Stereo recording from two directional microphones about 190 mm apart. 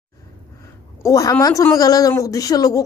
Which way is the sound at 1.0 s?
15° left (ahead or behind).